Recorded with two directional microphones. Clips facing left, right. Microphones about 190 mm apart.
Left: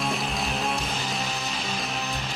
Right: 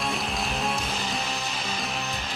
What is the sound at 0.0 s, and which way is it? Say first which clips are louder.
Music: left 1 dB; centre (ahead or behind).